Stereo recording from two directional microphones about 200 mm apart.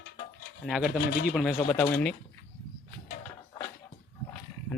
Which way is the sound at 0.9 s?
45° left (ahead or behind).